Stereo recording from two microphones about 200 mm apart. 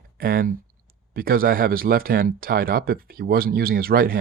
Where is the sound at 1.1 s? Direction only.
45° right (ahead or behind).